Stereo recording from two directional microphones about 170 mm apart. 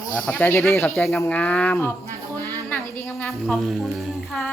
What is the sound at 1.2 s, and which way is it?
Speech, 10° left (ahead or behind).